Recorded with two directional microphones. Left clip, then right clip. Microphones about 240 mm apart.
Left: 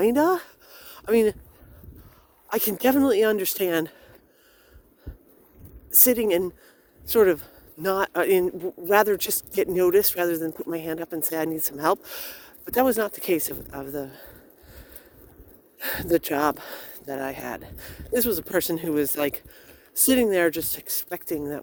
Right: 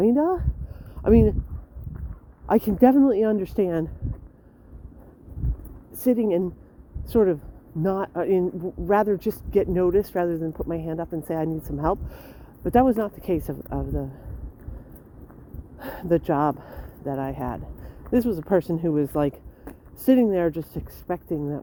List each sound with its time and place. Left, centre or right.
0.0 s speech: left
2.5 s a man's voice: left
5.9 s a man's voice: left
15.8 s a man's voice: left